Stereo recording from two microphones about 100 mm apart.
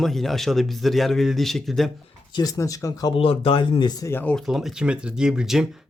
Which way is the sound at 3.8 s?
40° left (ahead or behind).